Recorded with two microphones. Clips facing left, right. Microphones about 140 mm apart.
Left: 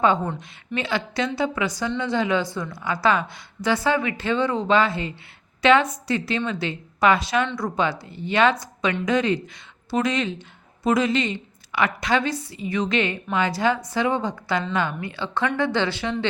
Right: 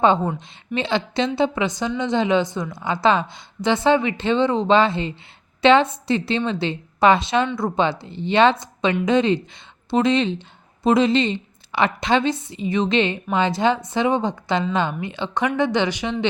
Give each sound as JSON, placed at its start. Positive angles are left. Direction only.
{"t": 0.3, "sound": "a woman's voice", "side_deg": -25}